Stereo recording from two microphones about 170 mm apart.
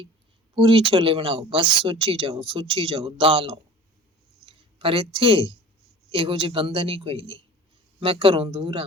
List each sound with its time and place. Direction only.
0.5 s speech: 30° right (ahead or behind)